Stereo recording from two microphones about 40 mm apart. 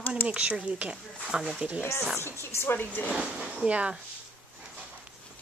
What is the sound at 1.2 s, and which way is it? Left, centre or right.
Speech, centre.